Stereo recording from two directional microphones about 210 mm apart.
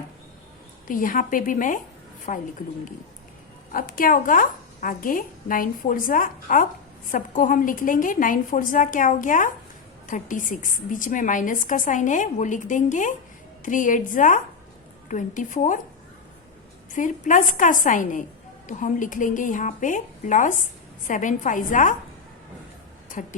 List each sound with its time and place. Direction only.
0.9 s a woman's voice: 40° left (ahead or behind)
3.7 s a woman's voice: 40° left (ahead or behind)
16.9 s a woman's voice: 40° left (ahead or behind)